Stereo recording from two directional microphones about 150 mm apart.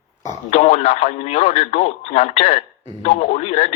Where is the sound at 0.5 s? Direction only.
50° left (ahead or behind).